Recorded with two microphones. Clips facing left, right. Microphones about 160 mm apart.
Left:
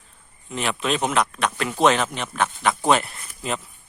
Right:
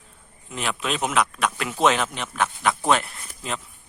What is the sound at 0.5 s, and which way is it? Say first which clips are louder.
A man's voice: left 3 dB; centre (ahead or behind).